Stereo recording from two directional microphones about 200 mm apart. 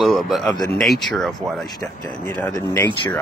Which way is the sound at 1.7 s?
15° left (ahead or behind).